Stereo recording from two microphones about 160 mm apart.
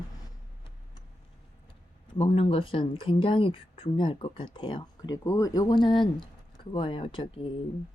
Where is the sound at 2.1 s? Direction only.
35° left (ahead or behind).